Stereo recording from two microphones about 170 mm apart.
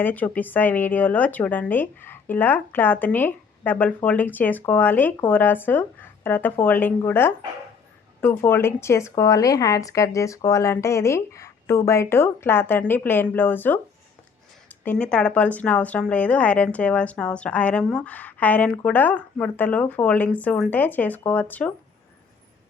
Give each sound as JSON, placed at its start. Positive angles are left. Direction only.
{"t": 0.0, "sound": "a woman's voice", "side_deg": 10}
{"t": 14.8, "sound": "a woman's voice", "side_deg": 5}